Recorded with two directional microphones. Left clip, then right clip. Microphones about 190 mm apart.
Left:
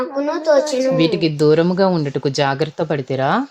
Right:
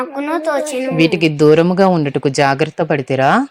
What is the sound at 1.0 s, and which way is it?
Speech, 40° left (ahead or behind).